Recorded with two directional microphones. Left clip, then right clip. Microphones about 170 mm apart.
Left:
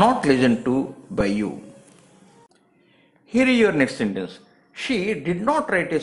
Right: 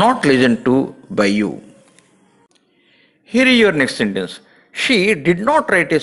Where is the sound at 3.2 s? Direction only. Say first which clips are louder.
Right 6 dB; 15° right (ahead or behind).